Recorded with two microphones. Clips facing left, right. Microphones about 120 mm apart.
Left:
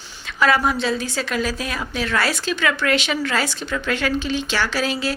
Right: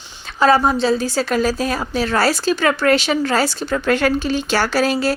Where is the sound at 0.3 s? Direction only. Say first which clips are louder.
Right 4 dB; 30° right (ahead or behind).